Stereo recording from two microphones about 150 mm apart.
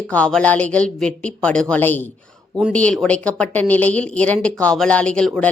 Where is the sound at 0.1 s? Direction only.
5° left (ahead or behind).